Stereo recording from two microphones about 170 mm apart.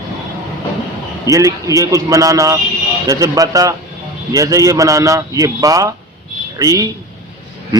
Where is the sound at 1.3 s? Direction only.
20° right (ahead or behind).